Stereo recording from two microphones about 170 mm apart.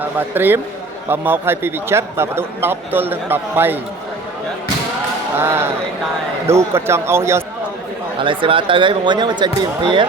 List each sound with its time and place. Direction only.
0.2 s a man's voice: 10° right (ahead or behind)
5.4 s a man's voice: 15° right (ahead or behind)
8.2 s speech: 30° right (ahead or behind)